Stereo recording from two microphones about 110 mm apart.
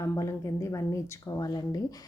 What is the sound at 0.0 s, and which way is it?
A woman's voice, 30° left (ahead or behind).